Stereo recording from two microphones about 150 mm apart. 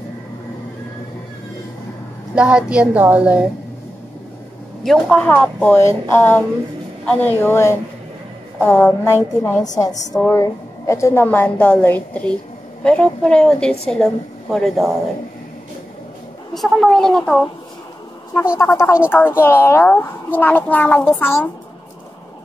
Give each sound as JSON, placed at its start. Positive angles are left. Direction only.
{"t": 2.3, "sound": "a woman's voice", "side_deg": -5}
{"t": 4.8, "sound": "a woman's voice", "side_deg": 0}
{"t": 16.5, "sound": "a woman's voice", "side_deg": 0}
{"t": 18.6, "sound": "a woman's voice", "side_deg": 15}